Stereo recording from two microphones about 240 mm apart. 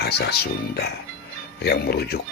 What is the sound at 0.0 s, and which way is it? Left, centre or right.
Speech, left.